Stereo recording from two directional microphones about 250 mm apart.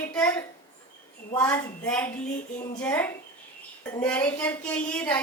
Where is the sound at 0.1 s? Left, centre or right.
Centre.